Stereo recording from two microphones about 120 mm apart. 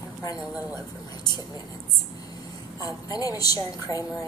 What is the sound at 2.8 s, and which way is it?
A woman's voice, 30° left (ahead or behind).